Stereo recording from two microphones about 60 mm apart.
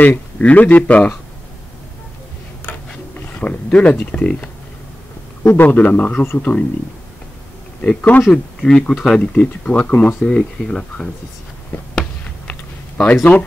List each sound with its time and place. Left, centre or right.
0.0 s speech: left
3.2 s speech: left
5.4 s a man's voice: left
5.8 s speech: left
8.2 s speech: centre
12.4 s a sound: left